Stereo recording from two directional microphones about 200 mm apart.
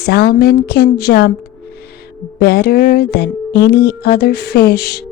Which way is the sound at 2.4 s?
50° left (ahead or behind).